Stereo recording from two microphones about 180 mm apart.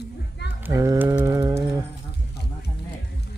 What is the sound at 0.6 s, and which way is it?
Mantra, 15° right (ahead or behind).